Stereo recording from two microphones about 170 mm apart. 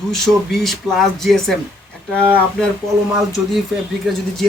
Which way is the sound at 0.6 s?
Centre (ahead or behind).